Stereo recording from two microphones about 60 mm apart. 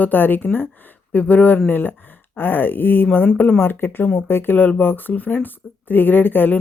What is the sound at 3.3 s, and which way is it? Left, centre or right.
Speech, left.